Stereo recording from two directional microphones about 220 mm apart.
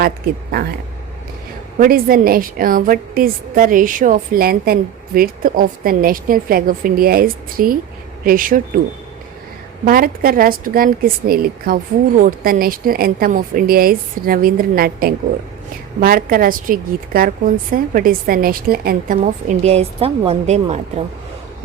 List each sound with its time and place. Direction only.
0.5 s speech: 45° right (ahead or behind)
1.8 s a woman's voice: 40° right (ahead or behind)
9.8 s a woman's voice: 40° right (ahead or behind)